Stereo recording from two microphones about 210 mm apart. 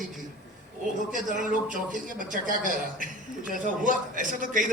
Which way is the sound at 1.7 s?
40° right (ahead or behind).